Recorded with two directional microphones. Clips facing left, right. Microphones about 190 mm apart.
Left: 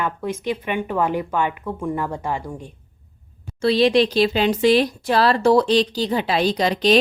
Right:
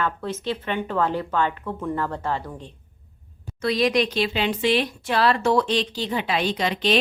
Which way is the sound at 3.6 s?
30° left (ahead or behind).